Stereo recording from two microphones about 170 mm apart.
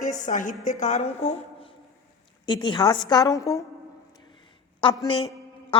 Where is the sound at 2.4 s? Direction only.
25° left (ahead or behind).